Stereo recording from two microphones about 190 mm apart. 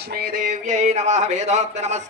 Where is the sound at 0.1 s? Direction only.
45° right (ahead or behind).